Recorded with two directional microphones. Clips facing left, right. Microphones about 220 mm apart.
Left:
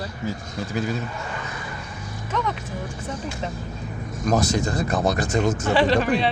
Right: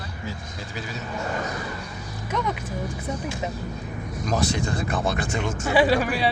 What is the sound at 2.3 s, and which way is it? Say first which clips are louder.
Speech: even; 10° right (ahead or behind).